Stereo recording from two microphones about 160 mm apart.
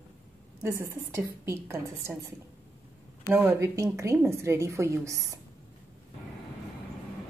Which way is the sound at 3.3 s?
15° right (ahead or behind).